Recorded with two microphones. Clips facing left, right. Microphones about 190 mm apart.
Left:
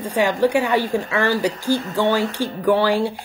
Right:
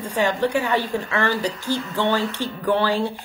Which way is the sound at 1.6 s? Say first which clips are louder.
Left 4 dB; 45° left (ahead or behind).